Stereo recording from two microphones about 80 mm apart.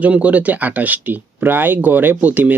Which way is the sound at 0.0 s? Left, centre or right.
Centre.